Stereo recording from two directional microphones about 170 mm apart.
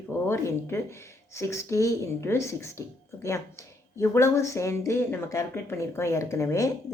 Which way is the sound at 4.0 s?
15° left (ahead or behind).